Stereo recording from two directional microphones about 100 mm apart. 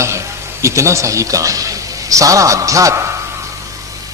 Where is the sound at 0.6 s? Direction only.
30° right (ahead or behind).